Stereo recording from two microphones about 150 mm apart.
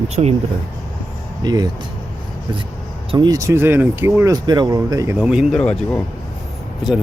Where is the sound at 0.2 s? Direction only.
40° right (ahead or behind).